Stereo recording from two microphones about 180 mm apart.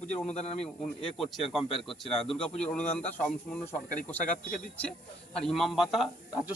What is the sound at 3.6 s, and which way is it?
Speech, 40° left (ahead or behind).